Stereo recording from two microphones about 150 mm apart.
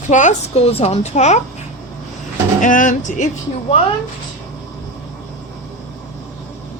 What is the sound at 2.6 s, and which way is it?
Speech, 60° left (ahead or behind).